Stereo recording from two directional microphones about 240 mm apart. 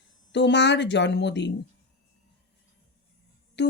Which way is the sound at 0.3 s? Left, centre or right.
Left.